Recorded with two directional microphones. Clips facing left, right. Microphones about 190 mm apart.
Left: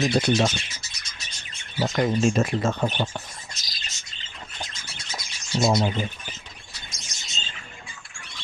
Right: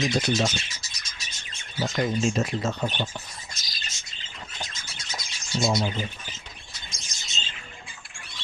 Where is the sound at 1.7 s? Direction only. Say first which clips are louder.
Left 3 dB; 55° left (ahead or behind).